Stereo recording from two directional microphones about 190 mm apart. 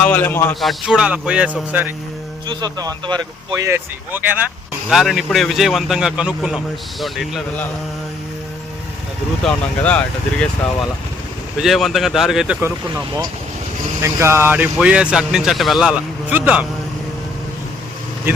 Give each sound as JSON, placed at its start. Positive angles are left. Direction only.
{"t": 0.0, "sound": "speech", "side_deg": 10}
{"t": 0.6, "sound": "speech", "side_deg": 0}
{"t": 2.5, "sound": "speech", "side_deg": -20}
{"t": 4.9, "sound": "speech", "side_deg": 0}
{"t": 9.4, "sound": "speech", "side_deg": 5}
{"t": 11.6, "sound": "speech", "side_deg": 0}